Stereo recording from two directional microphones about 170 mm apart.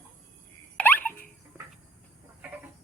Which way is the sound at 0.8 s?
10° left (ahead or behind).